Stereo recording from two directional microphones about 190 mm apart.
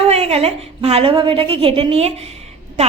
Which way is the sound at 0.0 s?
30° right (ahead or behind).